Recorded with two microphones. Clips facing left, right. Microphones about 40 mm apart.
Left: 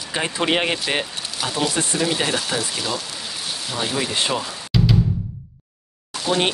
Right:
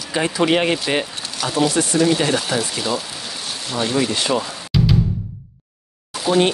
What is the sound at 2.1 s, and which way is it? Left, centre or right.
Speech, centre.